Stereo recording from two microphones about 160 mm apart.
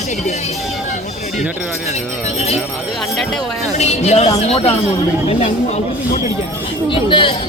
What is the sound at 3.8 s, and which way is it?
Speech, 45° left (ahead or behind).